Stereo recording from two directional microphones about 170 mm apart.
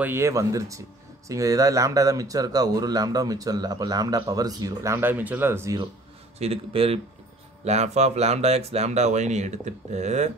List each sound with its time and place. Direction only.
0.0 s speech: 15° right (ahead or behind)
6.3 s speech: 35° right (ahead or behind)